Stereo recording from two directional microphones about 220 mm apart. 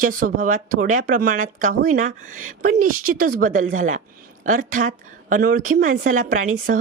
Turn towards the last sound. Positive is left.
turn(degrees=-35)  # may be behind; listen again after turning